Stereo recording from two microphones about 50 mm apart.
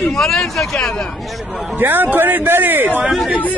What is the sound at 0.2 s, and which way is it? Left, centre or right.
Speech, centre.